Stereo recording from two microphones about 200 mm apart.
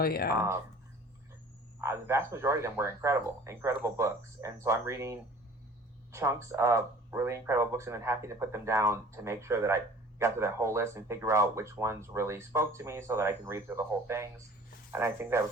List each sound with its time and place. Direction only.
0.0 s speech: 50° left (ahead or behind)
1.8 s speech: 15° right (ahead or behind)